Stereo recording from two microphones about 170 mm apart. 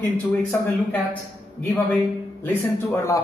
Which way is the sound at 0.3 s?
10° left (ahead or behind).